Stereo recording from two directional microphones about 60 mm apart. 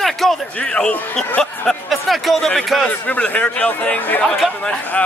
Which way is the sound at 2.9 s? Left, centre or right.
Left.